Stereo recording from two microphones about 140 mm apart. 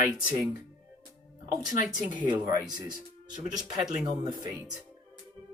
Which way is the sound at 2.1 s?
30° right (ahead or behind).